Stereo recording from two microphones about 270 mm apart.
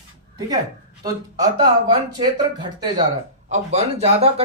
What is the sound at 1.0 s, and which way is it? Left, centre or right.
Speech, centre.